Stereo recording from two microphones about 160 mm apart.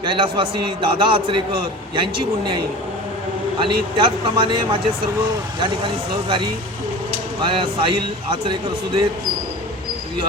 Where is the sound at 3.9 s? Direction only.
30° right (ahead or behind).